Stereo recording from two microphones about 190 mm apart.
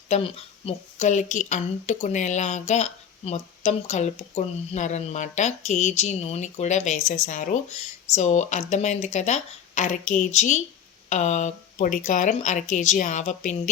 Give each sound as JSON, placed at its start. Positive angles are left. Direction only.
{"t": 0.1, "sound": "a woman's voice", "side_deg": 30}